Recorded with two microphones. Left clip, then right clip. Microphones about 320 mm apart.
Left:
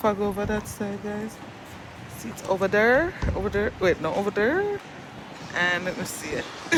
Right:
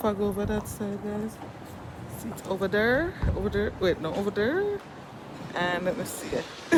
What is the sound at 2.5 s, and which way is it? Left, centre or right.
Speech, centre.